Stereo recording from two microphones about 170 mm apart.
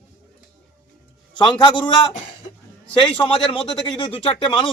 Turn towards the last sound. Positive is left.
turn(degrees=30)  # may be behind; listen again after turning